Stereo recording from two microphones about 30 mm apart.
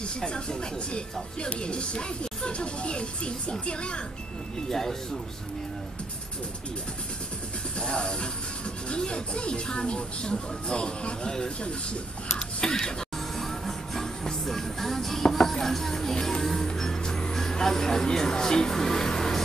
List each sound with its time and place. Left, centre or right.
0.2 s speech: left
4.6 s speech: centre
7.8 s speech: left
11.6 s a sound: left
13.4 s music: centre; by 17.3 s left
17.3 s speech: centre
18.7 s music: centre